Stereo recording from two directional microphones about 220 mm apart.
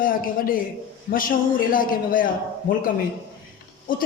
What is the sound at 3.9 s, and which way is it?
Speech, 40° left (ahead or behind).